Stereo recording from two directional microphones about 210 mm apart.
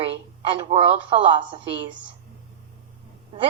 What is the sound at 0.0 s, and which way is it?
A woman's voice, 25° right (ahead or behind).